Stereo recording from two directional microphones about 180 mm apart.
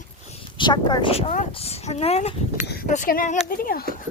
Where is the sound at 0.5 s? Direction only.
25° left (ahead or behind).